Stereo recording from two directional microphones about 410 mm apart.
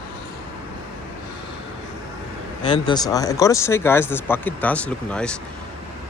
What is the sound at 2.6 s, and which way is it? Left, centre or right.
Speech, centre.